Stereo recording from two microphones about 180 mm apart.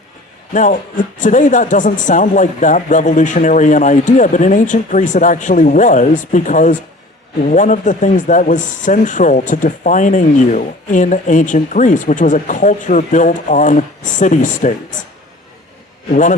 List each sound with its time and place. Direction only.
0.5 s speech: 45° left (ahead or behind)